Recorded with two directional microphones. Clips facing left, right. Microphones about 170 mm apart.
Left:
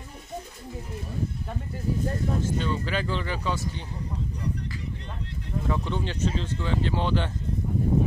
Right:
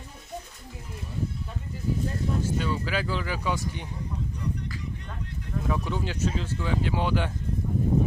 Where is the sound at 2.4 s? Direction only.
10° right (ahead or behind).